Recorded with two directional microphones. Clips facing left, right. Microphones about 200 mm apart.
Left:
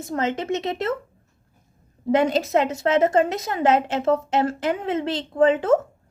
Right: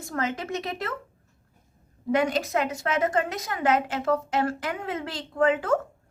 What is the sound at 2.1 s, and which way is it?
A woman's voice, 25° left (ahead or behind).